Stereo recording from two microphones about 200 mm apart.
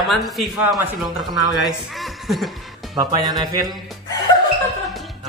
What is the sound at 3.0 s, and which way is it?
Speech, 20° right (ahead or behind).